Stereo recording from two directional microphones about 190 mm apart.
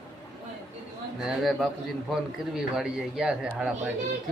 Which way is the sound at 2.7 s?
5° right (ahead or behind).